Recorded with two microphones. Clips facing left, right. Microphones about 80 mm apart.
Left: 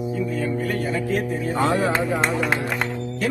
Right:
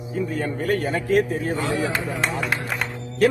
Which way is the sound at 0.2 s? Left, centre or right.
Right.